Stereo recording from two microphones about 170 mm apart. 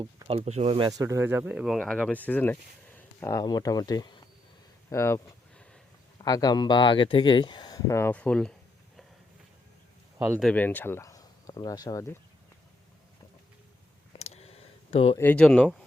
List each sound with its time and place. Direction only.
0.0 s speech: 30° right (ahead or behind)
0.9 s speech: 20° right (ahead or behind); by 4.1 s 20° left (ahead or behind)
4.9 s a sound: 15° left (ahead or behind)
6.1 s speech: 20° left (ahead or behind); by 8.5 s 5° left (ahead or behind)
10.2 s speech: 10° right (ahead or behind)
10.4 s speech: 10° left (ahead or behind)
14.1 s a sound: 40° left (ahead or behind)
15.2 s speech: 5° left (ahead or behind)